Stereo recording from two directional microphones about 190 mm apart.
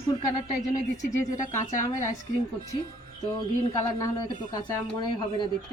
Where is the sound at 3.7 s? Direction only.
15° left (ahead or behind).